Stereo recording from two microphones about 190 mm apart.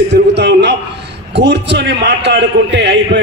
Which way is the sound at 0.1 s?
65° right (ahead or behind).